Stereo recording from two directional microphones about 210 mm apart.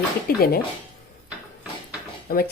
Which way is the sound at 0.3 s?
45° left (ahead or behind).